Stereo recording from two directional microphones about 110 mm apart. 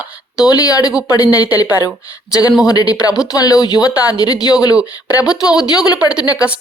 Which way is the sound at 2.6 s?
35° left (ahead or behind).